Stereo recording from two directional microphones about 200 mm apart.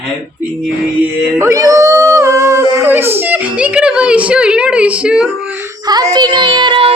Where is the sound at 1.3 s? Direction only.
15° right (ahead or behind).